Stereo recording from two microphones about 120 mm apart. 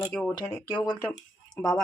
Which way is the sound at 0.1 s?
10° left (ahead or behind).